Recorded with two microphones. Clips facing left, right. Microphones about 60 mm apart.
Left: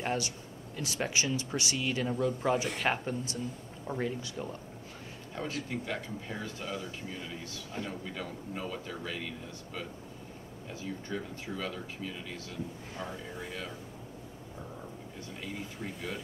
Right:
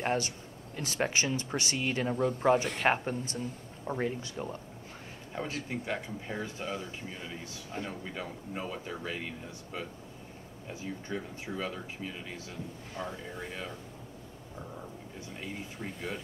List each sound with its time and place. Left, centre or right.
0.0 s a man's voice: right
5.5 s speech: right
10.7 s speech: right
12.9 s speech: centre
15.8 s speech: centre